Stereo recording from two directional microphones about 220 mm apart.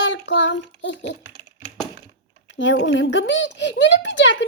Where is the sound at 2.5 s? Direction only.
55° left (ahead or behind).